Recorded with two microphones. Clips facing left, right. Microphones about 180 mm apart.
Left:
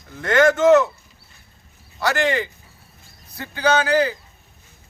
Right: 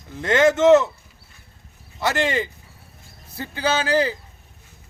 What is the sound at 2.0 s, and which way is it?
A man's voice, 25° right (ahead or behind).